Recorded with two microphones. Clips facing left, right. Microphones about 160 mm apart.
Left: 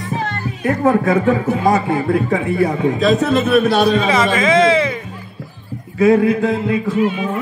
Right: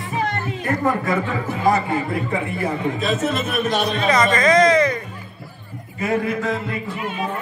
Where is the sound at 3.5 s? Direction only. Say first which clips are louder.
Left 11 dB; 75° left (ahead or behind).